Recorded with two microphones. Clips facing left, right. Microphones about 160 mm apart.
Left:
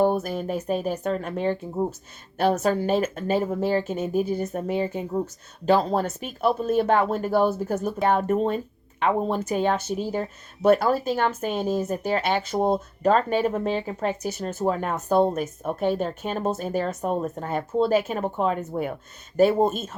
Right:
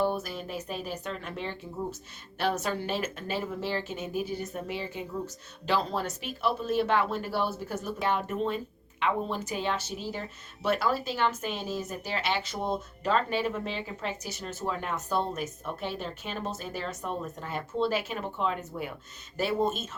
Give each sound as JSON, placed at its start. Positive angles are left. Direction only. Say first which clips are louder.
{"t": 0.0, "sound": "speech", "louder": "left 7 dB", "side_deg": 50}